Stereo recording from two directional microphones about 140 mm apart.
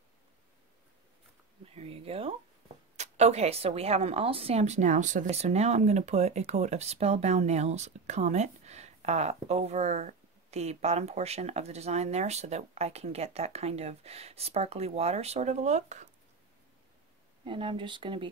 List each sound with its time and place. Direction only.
1.8 s a woman's voice: 45° right (ahead or behind)
17.5 s speech: 40° right (ahead or behind)